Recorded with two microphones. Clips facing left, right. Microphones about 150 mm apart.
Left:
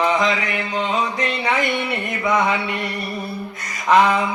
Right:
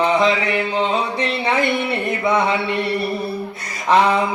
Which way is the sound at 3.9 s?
30° right (ahead or behind).